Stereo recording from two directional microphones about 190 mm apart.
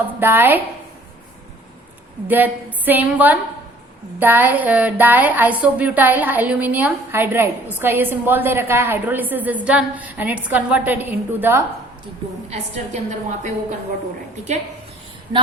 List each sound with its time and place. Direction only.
0.2 s speech: 10° right (ahead or behind)
2.2 s speech: 10° right (ahead or behind)
12.5 s a woman's voice: 35° right (ahead or behind)